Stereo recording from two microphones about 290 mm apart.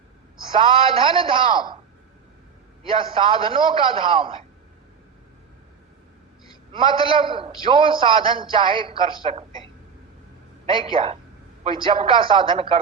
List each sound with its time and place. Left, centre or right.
0.4 s a man's voice: centre
2.9 s a man's voice: centre
6.7 s a man's voice: centre
10.7 s a man's voice: centre